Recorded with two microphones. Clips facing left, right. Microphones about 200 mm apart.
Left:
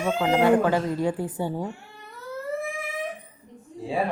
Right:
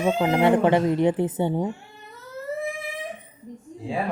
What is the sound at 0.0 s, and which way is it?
Speech, 20° right (ahead or behind).